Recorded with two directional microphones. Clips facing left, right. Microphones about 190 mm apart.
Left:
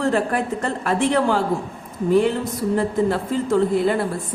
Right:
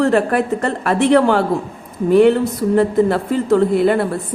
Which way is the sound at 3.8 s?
65° right (ahead or behind).